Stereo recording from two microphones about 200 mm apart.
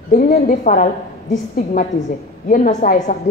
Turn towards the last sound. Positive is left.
turn(degrees=35)  # may be behind; listen again after turning